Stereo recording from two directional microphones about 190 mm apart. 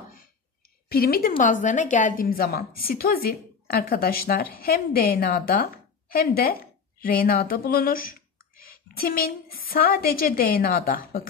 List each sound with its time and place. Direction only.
0.8 s a woman's voice: 50° left (ahead or behind)